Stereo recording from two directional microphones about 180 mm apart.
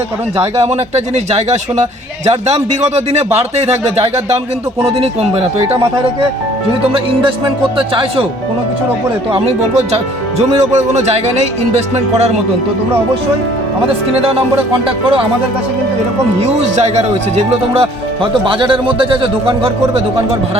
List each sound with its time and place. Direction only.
0.3 s speech: 35° right (ahead or behind)
6.9 s speech: 30° right (ahead or behind)
9.9 s speech: 35° right (ahead or behind)
16.4 s speech: 40° right (ahead or behind)